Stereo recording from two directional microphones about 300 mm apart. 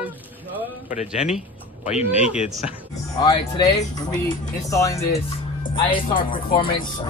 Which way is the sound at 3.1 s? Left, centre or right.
Centre.